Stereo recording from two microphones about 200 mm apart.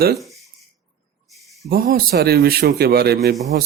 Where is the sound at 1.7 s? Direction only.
50° right (ahead or behind).